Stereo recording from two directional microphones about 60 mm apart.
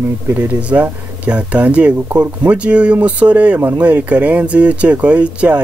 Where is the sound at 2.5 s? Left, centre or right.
Right.